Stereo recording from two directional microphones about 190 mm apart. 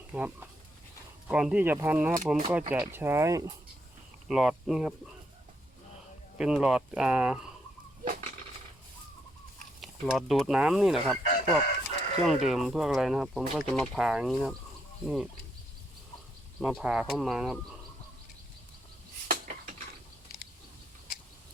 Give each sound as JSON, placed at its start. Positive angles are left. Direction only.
{"t": 0.1, "sound": "speech", "side_deg": -10}
{"t": 4.3, "sound": "speech", "side_deg": -5}
{"t": 6.3, "sound": "speech", "side_deg": -5}
{"t": 9.8, "sound": "speech", "side_deg": 0}
{"t": 11.3, "sound": "speech", "side_deg": 50}
{"t": 12.4, "sound": "speech", "side_deg": 0}
{"t": 16.6, "sound": "speech", "side_deg": 0}